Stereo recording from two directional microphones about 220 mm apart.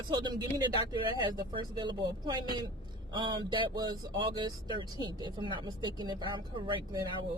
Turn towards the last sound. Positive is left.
turn(degrees=-20)  # may be behind; listen again after turning